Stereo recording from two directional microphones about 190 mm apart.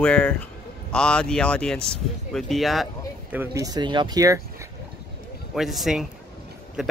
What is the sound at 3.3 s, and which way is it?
Speech, 15° right (ahead or behind).